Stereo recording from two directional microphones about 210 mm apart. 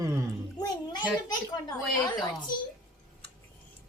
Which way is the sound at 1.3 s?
20° left (ahead or behind).